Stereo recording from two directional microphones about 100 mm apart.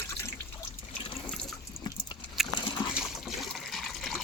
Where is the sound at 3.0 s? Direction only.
Centre (ahead or behind).